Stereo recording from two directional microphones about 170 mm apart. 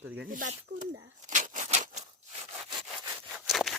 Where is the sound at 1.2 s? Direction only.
45° right (ahead or behind).